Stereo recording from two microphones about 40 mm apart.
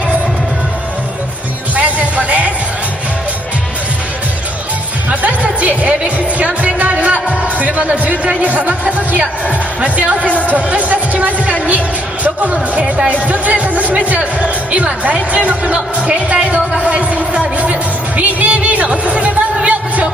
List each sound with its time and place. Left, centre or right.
1.8 s music: right
5.1 s music: right
7.6 s speech: right